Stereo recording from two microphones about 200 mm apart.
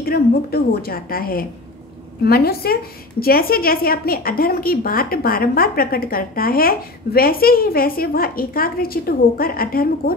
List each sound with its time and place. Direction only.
0.0 s a woman's voice: 50° left (ahead or behind)